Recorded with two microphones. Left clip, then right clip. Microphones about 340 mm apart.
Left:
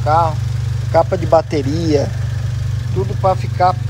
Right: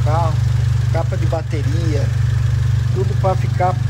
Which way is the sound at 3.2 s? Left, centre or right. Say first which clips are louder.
Left 5 dB; centre.